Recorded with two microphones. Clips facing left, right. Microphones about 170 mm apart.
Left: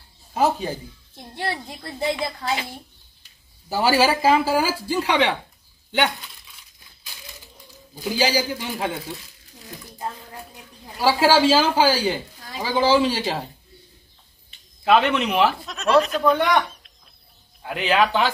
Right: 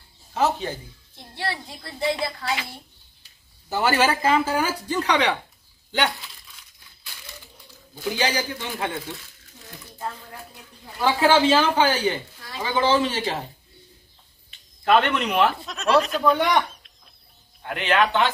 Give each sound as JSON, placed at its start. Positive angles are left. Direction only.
{"t": 0.3, "sound": "speech", "side_deg": 10}
{"t": 3.6, "sound": "speech", "side_deg": 10}
{"t": 5.9, "sound": "a sound", "side_deg": 0}
{"t": 7.9, "sound": "speech", "side_deg": 10}
{"t": 11.3, "sound": "speech", "side_deg": 10}
{"t": 14.9, "sound": "speech", "side_deg": 5}